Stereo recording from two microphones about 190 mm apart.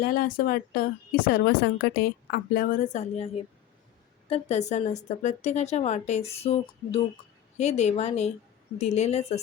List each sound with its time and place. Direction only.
0.0 s a woman's voice: 50° left (ahead or behind)
4.3 s speech: 35° left (ahead or behind)